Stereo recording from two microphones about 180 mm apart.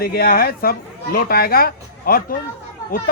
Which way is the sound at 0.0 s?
55° left (ahead or behind).